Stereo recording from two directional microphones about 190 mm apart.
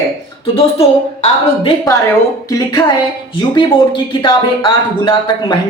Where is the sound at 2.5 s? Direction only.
20° left (ahead or behind).